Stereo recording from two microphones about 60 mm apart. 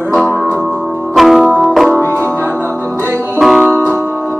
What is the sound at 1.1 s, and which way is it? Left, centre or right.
Music, centre.